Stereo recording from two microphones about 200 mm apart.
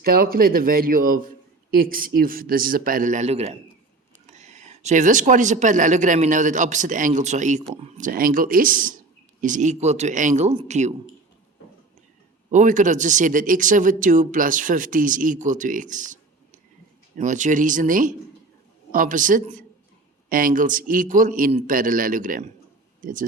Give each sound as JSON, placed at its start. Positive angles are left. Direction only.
{"t": 0.0, "sound": "a man's voice", "side_deg": -50}
{"t": 12.5, "sound": "speech", "side_deg": -40}
{"t": 17.2, "sound": "a man's voice", "side_deg": -40}